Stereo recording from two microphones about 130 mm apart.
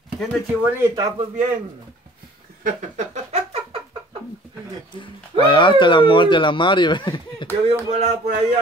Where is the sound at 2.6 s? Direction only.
80° right.